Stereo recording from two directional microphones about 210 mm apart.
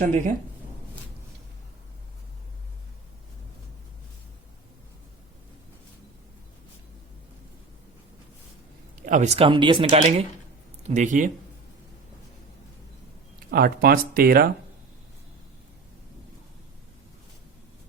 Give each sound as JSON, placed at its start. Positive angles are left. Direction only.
{"t": 0.0, "sound": "speech", "side_deg": -40}
{"t": 9.0, "sound": "speech", "side_deg": -35}
{"t": 13.5, "sound": "speech", "side_deg": -45}